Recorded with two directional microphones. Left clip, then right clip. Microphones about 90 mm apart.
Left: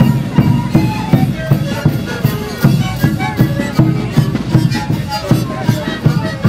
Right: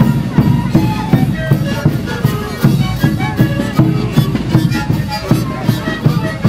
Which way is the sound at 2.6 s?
5° right (ahead or behind).